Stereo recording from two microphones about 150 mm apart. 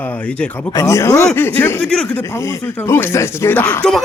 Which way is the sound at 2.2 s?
20° left (ahead or behind).